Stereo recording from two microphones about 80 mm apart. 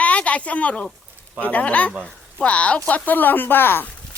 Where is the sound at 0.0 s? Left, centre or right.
Centre.